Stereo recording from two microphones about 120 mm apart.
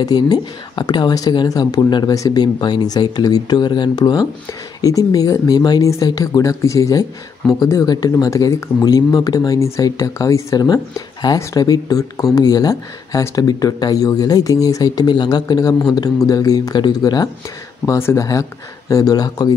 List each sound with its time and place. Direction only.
0.0 s speech: 35° left (ahead or behind)
17.8 s speech: 25° left (ahead or behind)